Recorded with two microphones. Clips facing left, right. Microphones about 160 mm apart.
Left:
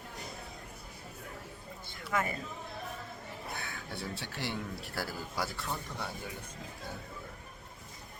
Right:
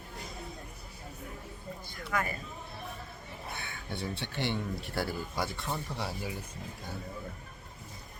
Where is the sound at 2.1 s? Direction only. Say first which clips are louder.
Even; 20° left (ahead or behind).